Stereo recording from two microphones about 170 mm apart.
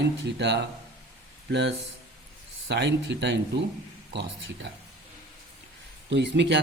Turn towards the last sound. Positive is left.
turn(degrees=-90)